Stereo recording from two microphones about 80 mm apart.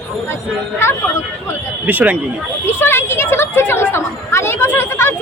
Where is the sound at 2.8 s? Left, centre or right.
Left.